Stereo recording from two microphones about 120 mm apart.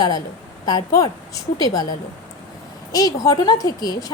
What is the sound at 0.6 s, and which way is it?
A woman's voice, 35° left (ahead or behind).